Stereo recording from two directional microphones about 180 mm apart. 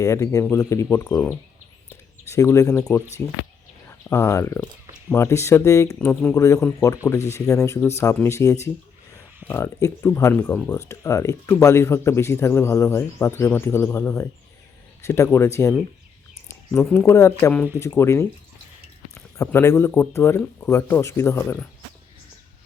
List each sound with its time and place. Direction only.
0.0 s speech: 15° left (ahead or behind)
1.9 s a sound: 15° left (ahead or behind)
3.8 s speech: 15° left (ahead or behind)
16.5 s a sound: 15° left (ahead or behind)
17.1 s speech: 15° left (ahead or behind)
19.4 s speech: 15° left (ahead or behind)